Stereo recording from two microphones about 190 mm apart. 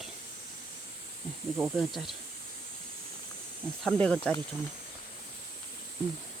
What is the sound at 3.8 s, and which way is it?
Speech, 5° left (ahead or behind).